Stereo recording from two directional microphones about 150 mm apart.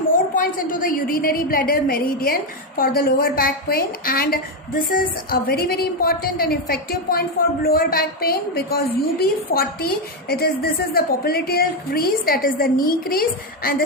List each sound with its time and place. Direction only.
0.1 s a woman's voice: 65° left (ahead or behind)